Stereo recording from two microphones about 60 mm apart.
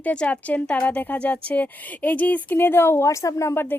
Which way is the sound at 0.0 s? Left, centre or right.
Left.